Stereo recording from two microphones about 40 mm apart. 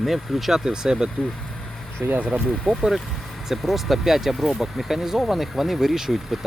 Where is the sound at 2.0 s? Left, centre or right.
Right.